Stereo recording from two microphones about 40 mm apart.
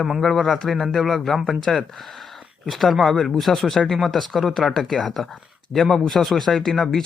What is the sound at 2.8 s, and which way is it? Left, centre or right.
Speech, centre.